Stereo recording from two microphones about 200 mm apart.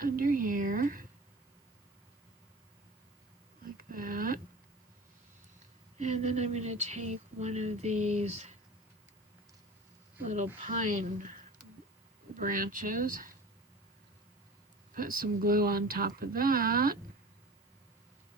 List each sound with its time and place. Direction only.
0.0 s a sound: 45° right (ahead or behind)
3.8 s a sound: 45° right (ahead or behind)
6.0 s speech: 35° right (ahead or behind)
10.2 s speech: 35° right (ahead or behind)
12.4 s speech: 40° right (ahead or behind)
14.9 s speech: 45° right (ahead or behind)